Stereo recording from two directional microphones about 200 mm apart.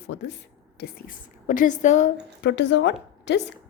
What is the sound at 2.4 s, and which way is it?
A woman's voice, 60° left (ahead or behind).